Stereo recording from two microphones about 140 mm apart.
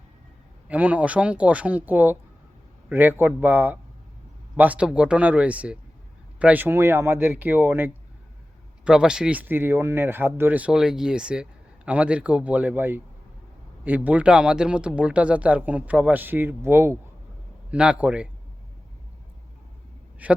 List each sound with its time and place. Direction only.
0.7 s speech: 10° right (ahead or behind)
20.2 s speech: 10° right (ahead or behind)